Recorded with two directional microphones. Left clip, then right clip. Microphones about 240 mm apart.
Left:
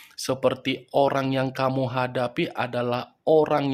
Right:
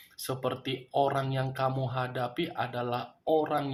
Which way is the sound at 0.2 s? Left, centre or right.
Left.